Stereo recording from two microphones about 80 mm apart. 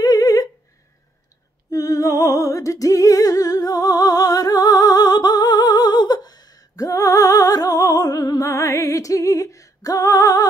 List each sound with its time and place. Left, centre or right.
0.0 s a sound: left
1.7 s music: left
6.8 s music: left